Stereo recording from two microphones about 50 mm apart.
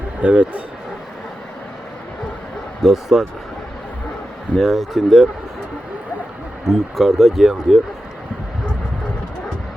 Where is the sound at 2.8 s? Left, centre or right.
Centre.